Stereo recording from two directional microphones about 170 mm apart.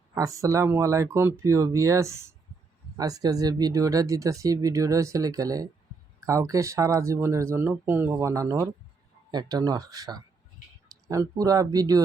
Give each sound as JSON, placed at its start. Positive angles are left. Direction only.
{"t": 0.1, "sound": "speech", "side_deg": -20}